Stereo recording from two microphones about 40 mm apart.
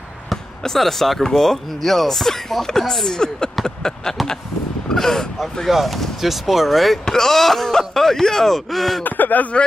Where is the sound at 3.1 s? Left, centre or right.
Centre.